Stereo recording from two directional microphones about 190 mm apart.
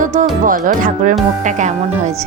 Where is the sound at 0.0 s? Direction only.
40° right (ahead or behind).